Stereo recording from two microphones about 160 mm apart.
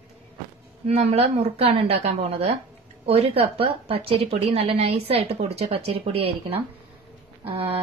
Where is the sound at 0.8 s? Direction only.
40° right (ahead or behind).